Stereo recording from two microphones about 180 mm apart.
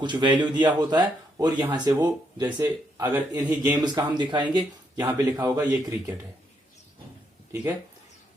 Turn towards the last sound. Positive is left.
turn(degrees=-15)  # may be behind; listen again after turning